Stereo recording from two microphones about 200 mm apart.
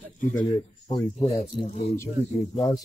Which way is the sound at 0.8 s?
20° left (ahead or behind).